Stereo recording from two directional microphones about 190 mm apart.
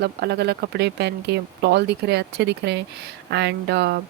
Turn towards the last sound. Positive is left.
turn(degrees=-60)  # may be behind; listen again after turning